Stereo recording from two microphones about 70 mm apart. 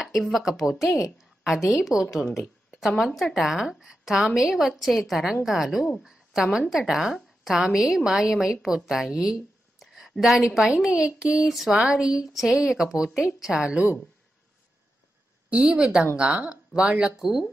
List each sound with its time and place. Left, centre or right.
0.0 s a woman's voice: centre
15.7 s a woman's voice: centre
17.2 s a woman's voice: centre